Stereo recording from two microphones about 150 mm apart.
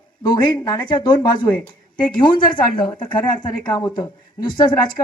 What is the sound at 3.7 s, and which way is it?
Speech, 30° left (ahead or behind).